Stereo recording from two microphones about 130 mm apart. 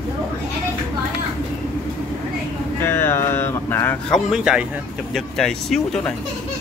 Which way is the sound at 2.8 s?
20° left (ahead or behind).